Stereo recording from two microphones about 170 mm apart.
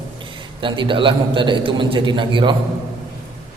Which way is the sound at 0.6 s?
30° right (ahead or behind).